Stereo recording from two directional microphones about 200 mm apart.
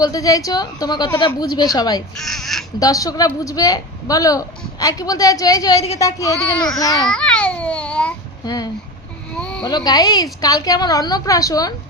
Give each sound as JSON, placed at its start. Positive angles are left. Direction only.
{"t": 0.0, "sound": "a woman's voice", "side_deg": 15}
{"t": 2.1, "sound": "speech", "side_deg": 0}
{"t": 2.7, "sound": "a woman's voice", "side_deg": 15}
{"t": 6.3, "sound": "speech", "side_deg": 5}
{"t": 6.7, "sound": "a woman's voice", "side_deg": 20}
{"t": 7.1, "sound": "a child's voice", "side_deg": 5}
{"t": 8.4, "sound": "a woman's voice", "side_deg": 20}
{"t": 9.3, "sound": "a sound", "side_deg": 5}
{"t": 9.6, "sound": "a woman's voice", "side_deg": 20}